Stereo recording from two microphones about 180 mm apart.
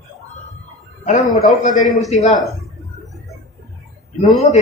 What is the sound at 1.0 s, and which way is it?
A man's voice, 40° left (ahead or behind).